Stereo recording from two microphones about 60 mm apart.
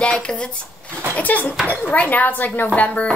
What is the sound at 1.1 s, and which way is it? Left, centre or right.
Speech, left.